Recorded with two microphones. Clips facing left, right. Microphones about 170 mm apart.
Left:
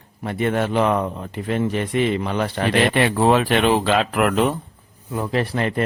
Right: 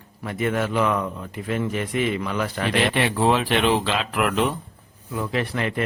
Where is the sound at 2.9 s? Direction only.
50° left (ahead or behind).